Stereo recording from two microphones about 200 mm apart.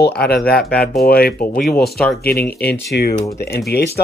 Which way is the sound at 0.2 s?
50° left (ahead or behind).